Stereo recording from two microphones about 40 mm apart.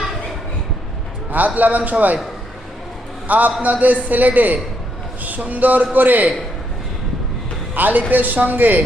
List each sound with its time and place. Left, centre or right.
1.3 s speech: right
3.2 s a man's voice: right
7.8 s speech: right